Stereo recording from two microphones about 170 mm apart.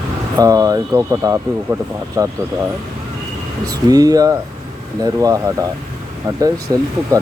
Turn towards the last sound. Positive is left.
turn(degrees=-20)  # may be behind; listen again after turning